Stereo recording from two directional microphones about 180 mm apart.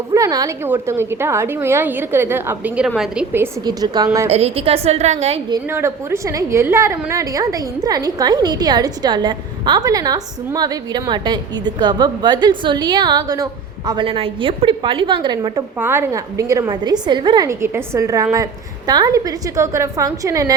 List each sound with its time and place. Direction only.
0.1 s a woman's voice: 20° right (ahead or behind); by 3.2 s centre (ahead or behind)
3.6 s a woman's voice: 20° right (ahead or behind)
4.3 s a woman's voice: 35° right (ahead or behind)
5.6 s a woman's voice: 15° right (ahead or behind)
15.8 s a woman's voice: 15° right (ahead or behind)